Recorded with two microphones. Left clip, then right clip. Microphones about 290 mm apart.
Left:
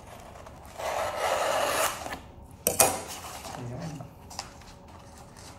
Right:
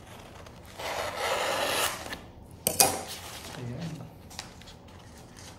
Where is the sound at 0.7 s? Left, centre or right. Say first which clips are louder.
Left 3 dB; centre.